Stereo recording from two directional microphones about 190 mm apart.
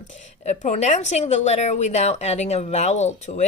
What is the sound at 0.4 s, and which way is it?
A woman's voice, 40° left (ahead or behind).